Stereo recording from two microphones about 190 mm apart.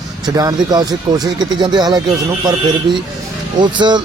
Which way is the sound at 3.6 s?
25° right (ahead or behind).